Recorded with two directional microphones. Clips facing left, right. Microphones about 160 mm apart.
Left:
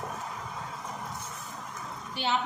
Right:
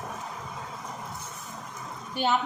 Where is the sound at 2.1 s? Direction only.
45° right (ahead or behind).